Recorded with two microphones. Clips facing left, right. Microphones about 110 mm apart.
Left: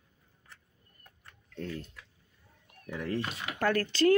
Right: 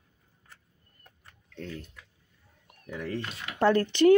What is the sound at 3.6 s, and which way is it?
Speech, 25° right (ahead or behind).